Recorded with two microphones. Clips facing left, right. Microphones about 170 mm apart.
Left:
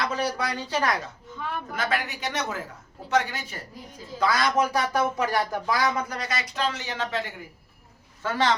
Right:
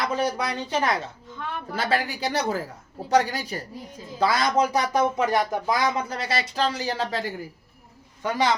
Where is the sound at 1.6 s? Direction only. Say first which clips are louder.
Right 4 dB; 30° right (ahead or behind).